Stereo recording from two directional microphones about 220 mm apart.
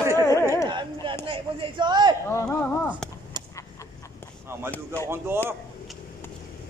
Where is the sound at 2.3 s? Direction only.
10° left (ahead or behind).